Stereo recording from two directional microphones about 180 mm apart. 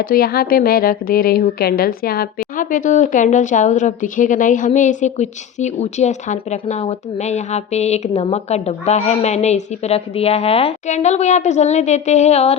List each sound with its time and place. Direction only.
0.0 s a woman's voice: 55° left (ahead or behind); by 12.5 s 35° left (ahead or behind)